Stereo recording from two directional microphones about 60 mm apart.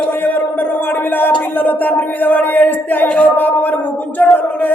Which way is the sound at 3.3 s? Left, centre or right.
Left.